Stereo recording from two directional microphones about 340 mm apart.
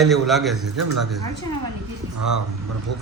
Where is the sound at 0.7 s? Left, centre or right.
Right.